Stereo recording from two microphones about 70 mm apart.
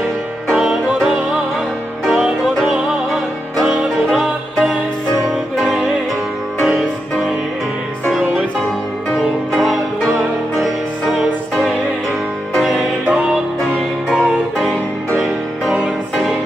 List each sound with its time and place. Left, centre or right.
0.6 s music: centre
3.6 s music: centre
9.5 s music: centre
14.0 s music: centre
15.7 s music: centre